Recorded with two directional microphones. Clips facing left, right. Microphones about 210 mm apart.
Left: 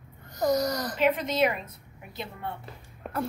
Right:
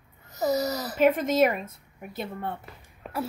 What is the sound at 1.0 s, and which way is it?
A woman's voice, 45° right (ahead or behind).